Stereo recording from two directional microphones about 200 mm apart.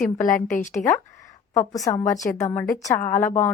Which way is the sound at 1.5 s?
15° left (ahead or behind).